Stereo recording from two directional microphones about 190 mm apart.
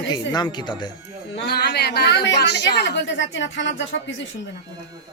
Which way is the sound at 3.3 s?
70° left (ahead or behind).